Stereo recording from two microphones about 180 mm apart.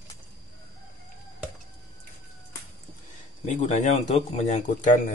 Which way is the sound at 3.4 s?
40° left (ahead or behind).